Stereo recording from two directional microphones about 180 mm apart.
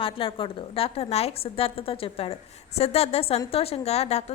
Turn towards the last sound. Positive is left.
turn(degrees=35)  # may be behind; listen again after turning